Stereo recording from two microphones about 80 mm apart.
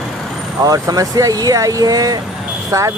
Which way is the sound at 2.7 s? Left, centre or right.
Right.